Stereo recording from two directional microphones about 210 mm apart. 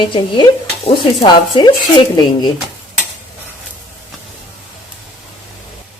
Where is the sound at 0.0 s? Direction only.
25° left (ahead or behind).